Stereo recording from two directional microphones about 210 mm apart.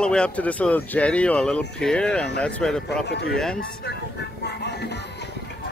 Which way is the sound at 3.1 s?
50° left (ahead or behind).